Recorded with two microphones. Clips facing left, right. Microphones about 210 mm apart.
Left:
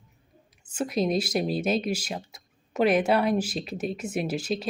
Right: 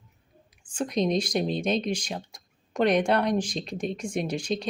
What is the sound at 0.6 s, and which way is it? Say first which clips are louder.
Speech: even; 5° left (ahead or behind).